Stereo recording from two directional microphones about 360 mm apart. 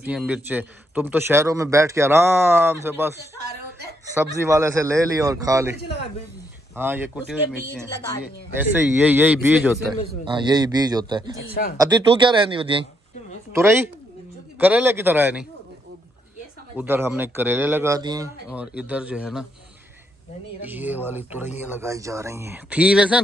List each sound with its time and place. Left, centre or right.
0.0 s a man's voice: centre
4.2 s a man's voice: centre
11.4 s speech: left
11.8 s a man's voice: centre
16.7 s speech: centre
20.6 s speech: centre